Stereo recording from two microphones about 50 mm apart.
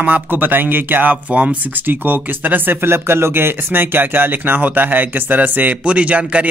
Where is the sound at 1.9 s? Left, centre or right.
Right.